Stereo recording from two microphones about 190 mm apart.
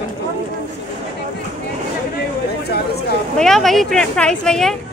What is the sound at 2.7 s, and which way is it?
Speech, 60° left (ahead or behind).